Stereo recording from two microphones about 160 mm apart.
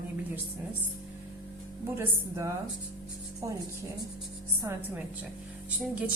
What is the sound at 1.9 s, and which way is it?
Speech, 20° right (ahead or behind).